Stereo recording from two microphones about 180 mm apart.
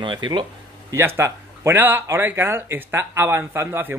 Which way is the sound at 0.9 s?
15° right (ahead or behind).